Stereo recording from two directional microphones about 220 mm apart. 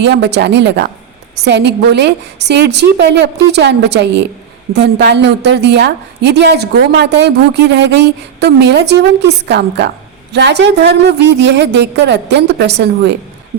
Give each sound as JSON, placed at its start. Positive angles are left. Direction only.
{"t": 0.0, "sound": "a woman's voice", "side_deg": -50}